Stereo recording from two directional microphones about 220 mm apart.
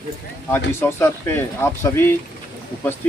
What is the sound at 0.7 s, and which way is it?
Speech, 10° left (ahead or behind).